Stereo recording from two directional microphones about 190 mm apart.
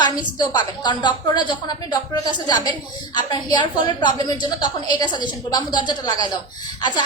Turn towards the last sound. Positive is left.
turn(degrees=25)  # may be behind; listen again after turning